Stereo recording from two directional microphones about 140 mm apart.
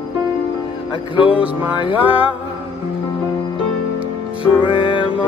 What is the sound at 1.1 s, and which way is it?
Music, 40° left (ahead or behind).